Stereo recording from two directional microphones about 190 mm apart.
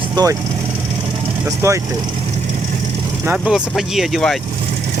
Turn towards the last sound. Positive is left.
turn(degrees=0)  # may be behind; listen again after turning